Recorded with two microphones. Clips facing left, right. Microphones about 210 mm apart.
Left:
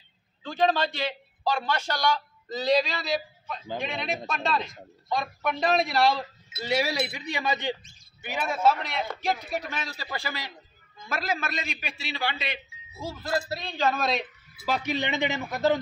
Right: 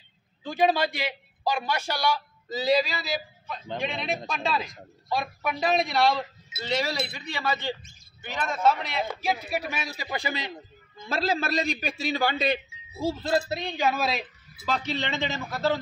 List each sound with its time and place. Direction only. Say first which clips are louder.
0.4 s a man's voice: right 1 dB; 10° right (ahead or behind)
14.7 s speech: left 1 dB; 10° left (ahead or behind)